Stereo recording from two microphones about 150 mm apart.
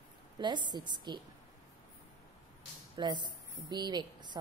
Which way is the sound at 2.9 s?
30° right (ahead or behind).